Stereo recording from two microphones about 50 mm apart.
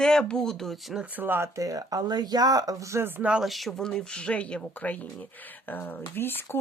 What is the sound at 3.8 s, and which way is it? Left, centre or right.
Speech, centre.